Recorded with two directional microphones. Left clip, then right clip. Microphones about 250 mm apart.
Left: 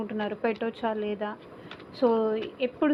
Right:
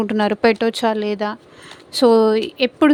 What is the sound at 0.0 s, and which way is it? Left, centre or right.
Speech, right.